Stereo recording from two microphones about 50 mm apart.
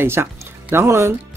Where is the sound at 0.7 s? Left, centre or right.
Right.